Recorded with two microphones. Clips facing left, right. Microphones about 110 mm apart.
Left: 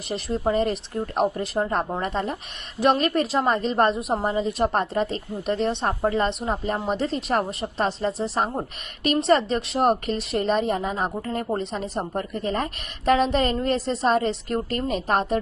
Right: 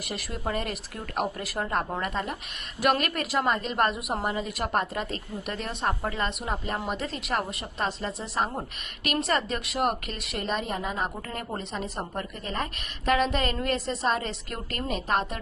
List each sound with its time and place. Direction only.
0.1 s speech: 30° left (ahead or behind)
12.1 s speech: 35° left (ahead or behind)